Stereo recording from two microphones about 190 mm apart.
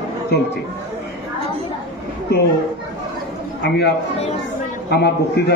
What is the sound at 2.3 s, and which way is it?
Speech, 60° left (ahead or behind).